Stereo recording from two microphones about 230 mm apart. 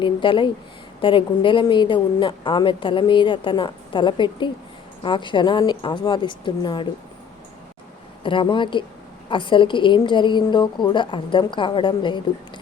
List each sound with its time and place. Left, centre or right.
0.0 s a woman's voice: left
8.2 s a woman's voice: left